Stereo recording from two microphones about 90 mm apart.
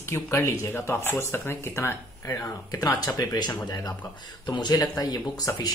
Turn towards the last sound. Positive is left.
turn(degrees=45)  # may be behind; listen again after turning